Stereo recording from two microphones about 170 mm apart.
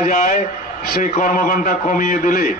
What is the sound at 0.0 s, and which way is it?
A man's voice, 50° left (ahead or behind).